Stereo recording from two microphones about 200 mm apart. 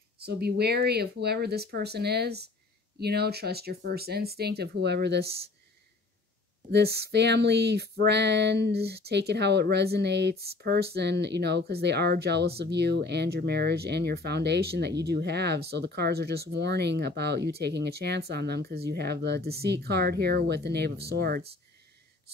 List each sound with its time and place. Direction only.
0.2 s speech: 55° right (ahead or behind)
6.7 s speech: 55° right (ahead or behind)